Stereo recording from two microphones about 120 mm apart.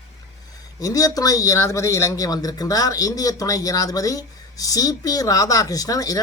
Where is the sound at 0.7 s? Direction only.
30° left (ahead or behind).